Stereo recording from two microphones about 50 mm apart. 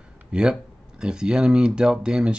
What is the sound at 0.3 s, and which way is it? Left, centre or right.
Speech, centre.